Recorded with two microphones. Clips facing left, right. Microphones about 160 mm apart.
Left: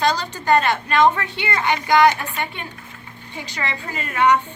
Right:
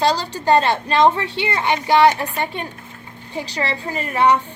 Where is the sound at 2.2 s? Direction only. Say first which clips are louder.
Right 4 dB; 35° right (ahead or behind).